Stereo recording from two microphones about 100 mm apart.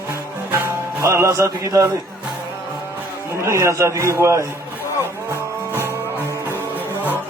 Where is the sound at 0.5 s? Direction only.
25° right (ahead or behind).